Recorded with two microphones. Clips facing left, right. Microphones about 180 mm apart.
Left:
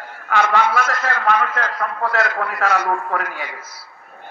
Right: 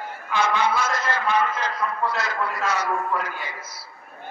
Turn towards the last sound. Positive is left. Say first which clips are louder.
# left 2 dB
turn(degrees=75)  # may be behind; listen again after turning